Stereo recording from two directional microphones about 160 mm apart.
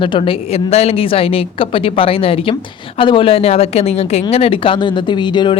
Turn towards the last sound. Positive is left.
turn(degrees=30)  # may be behind; listen again after turning